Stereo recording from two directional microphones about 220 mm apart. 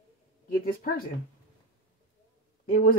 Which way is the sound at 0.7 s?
40° left (ahead or behind).